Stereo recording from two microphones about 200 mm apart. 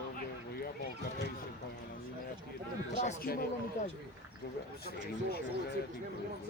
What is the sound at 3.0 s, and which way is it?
Speech, 40° left (ahead or behind).